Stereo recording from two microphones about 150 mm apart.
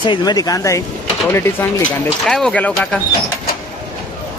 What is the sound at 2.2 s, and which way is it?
Speech, 5° left (ahead or behind).